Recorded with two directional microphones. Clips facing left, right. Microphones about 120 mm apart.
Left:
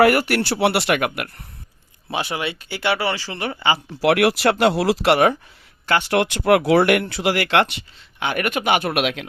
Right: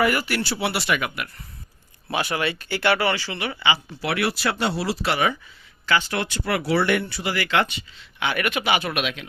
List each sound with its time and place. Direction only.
0.0 s speech: 65° left (ahead or behind)
2.0 s speech: 20° left (ahead or behind)
3.2 s speech: 40° left (ahead or behind)
4.0 s speech: 80° left
5.8 s speech: 60° left (ahead or behind)
8.2 s speech: 45° left (ahead or behind); by 9.2 s 70° left (ahead or behind)